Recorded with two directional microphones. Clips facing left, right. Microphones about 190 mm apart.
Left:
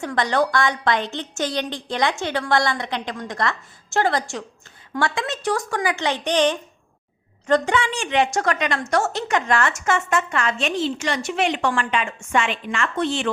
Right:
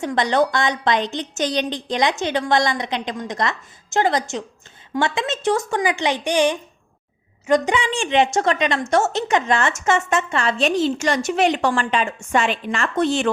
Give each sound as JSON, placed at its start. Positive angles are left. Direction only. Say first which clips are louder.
{"t": 0.0, "sound": "a woman's voice", "louder": "right 2 dB", "side_deg": -20}